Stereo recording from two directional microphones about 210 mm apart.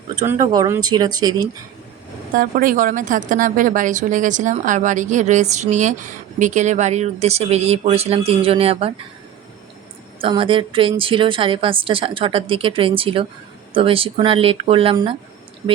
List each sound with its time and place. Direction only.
0.2 s a woman's voice: 15° right (ahead or behind)
2.3 s a woman's voice: 40° right (ahead or behind)
10.2 s a woman's voice: 25° right (ahead or behind)